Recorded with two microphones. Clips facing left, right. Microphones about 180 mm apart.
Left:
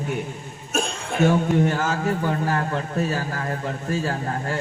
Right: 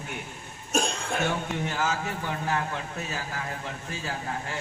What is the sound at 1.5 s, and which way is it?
A man's voice, 55° left (ahead or behind).